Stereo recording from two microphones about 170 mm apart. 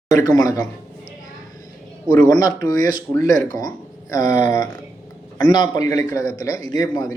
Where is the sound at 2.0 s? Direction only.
20° left (ahead or behind).